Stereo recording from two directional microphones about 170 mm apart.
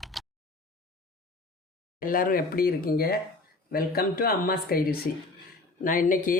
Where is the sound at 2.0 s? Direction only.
55° left (ahead or behind).